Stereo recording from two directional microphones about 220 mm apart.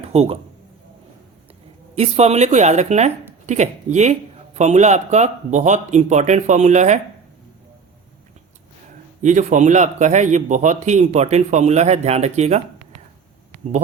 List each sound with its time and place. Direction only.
0.0 s a man's voice: 25° right (ahead or behind)
2.0 s speech: 30° right (ahead or behind)
9.2 s speech: 35° right (ahead or behind)